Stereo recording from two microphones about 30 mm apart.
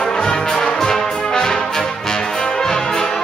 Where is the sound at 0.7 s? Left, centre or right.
Centre.